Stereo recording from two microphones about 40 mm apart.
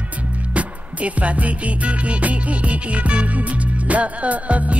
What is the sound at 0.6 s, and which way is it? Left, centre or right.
Music, right.